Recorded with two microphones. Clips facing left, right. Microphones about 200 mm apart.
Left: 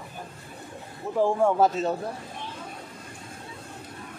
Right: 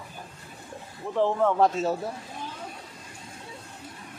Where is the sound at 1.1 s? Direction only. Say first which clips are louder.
Left 1 dB; 10° left (ahead or behind).